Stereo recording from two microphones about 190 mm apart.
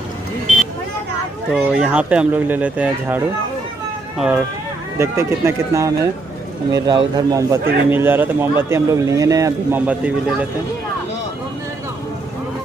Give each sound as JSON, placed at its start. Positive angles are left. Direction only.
{"t": 1.5, "sound": "a man's voice", "side_deg": -5}
{"t": 4.2, "sound": "a man's voice", "side_deg": -5}